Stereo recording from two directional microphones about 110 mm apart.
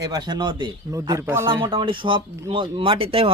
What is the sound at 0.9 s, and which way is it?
Speech, 30° right (ahead or behind).